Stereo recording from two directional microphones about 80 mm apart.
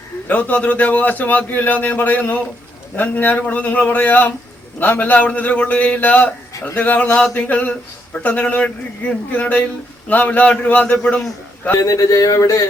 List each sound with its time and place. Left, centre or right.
0.3 s a man's voice: centre
11.8 s speech: left